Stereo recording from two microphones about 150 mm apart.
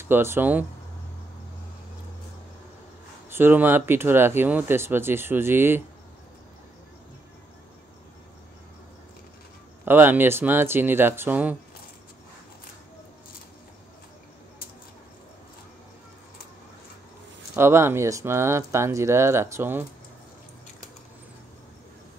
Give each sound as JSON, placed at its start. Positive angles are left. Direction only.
{"t": 0.0, "sound": "speech", "side_deg": -15}
{"t": 3.3, "sound": "speech", "side_deg": -15}
{"t": 9.8, "sound": "speech", "side_deg": -15}
{"t": 17.6, "sound": "speech", "side_deg": -15}